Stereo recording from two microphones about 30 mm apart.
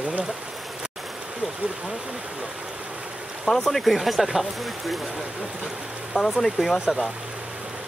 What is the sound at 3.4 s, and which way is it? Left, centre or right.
Speech, centre.